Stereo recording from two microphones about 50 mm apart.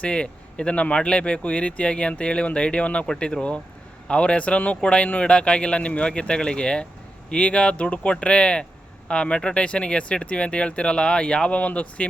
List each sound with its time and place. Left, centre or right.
0.0 s speech: left